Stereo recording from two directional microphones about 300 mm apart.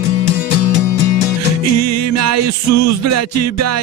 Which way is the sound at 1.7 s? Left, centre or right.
Right.